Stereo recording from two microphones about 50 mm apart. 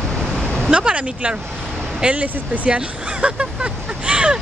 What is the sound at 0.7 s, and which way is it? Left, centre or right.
Speech, right.